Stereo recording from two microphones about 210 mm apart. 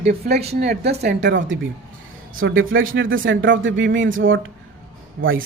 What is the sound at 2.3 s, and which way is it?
Speech, 70° right (ahead or behind).